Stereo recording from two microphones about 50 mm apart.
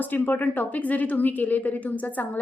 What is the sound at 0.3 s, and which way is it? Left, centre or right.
A woman's voice, left.